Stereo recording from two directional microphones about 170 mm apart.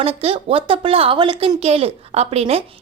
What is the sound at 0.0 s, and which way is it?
A woman's voice, 35° right (ahead or behind).